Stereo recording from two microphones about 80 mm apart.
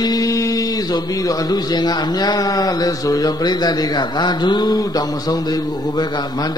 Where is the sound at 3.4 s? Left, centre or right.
Left.